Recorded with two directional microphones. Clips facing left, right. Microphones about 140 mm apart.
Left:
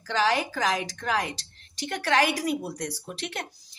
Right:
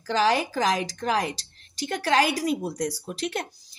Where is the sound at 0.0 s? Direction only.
35° right (ahead or behind).